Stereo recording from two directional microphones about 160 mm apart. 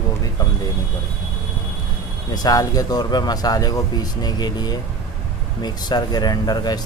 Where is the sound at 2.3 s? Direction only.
25° left (ahead or behind).